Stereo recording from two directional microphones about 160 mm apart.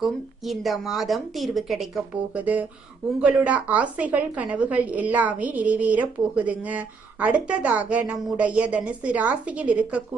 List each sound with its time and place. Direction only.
0.0 s a woman's voice: centre (ahead or behind)